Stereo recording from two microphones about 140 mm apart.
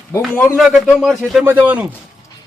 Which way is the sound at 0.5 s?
Centre (ahead or behind).